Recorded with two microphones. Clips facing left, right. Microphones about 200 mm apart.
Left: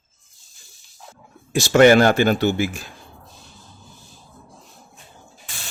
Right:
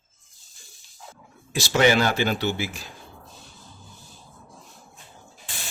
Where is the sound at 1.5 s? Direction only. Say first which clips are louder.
Left 7 dB; 50° left (ahead or behind).